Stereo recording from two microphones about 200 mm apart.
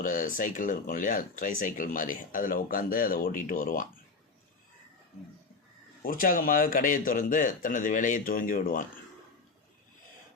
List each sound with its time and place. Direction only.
0.0 s speech: 45° left (ahead or behind)
6.0 s speech: 45° left (ahead or behind)